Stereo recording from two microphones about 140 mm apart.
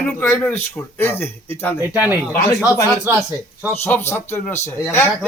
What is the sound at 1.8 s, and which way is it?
Speech, 15° right (ahead or behind).